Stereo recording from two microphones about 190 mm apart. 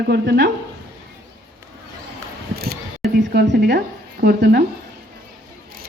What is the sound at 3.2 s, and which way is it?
Speech, 65° right (ahead or behind).